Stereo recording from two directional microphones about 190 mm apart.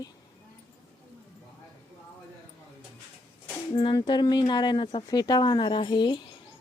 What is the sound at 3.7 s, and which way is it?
Speech, 25° left (ahead or behind).